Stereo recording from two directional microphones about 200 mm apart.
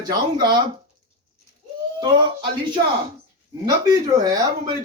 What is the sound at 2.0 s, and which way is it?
Speech, 20° right (ahead or behind).